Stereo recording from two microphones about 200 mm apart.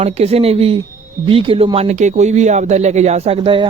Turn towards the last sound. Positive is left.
turn(degrees=-25)  # may be behind; listen again after turning